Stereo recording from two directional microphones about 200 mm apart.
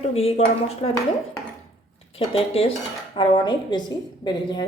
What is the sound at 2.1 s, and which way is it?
Speech, 30° left (ahead or behind).